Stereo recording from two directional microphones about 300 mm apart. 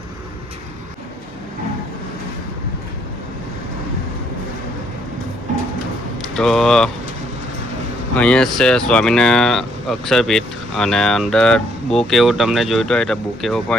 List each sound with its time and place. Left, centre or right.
6.3 s speech: centre
8.1 s speech: centre